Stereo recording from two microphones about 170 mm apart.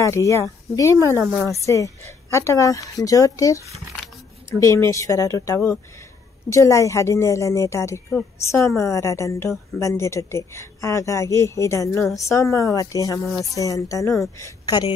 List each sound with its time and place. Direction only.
0.0 s a woman's voice: 15° left (ahead or behind)